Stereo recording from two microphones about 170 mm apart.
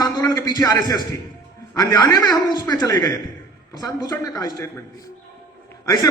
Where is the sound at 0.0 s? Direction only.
20° left (ahead or behind).